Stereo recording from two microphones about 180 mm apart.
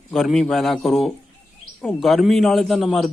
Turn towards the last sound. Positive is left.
turn(degrees=0)  # may be behind; listen again after turning